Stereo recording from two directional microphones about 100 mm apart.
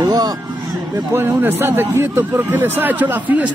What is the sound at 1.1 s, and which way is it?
A man's voice, 20° right (ahead or behind).